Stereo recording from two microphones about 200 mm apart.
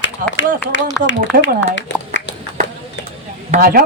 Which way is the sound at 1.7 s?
65° left (ahead or behind).